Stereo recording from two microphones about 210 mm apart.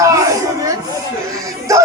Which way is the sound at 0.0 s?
15° right (ahead or behind).